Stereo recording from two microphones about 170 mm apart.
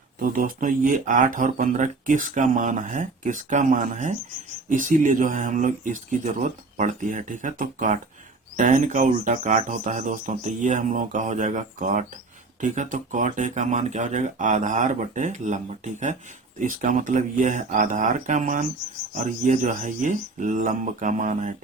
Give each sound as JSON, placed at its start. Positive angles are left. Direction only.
{"t": 0.2, "sound": "speech", "side_deg": -55}